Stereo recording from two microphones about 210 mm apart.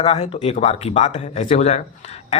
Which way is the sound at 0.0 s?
30° left (ahead or behind).